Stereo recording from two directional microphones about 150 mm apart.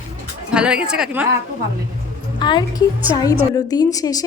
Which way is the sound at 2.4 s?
30° left (ahead or behind).